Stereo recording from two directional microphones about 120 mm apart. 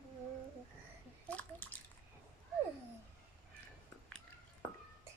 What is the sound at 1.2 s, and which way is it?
Bathtub, 10° left (ahead or behind).